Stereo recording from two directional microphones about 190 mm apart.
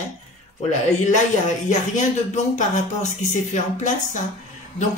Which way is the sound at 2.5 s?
40° left (ahead or behind).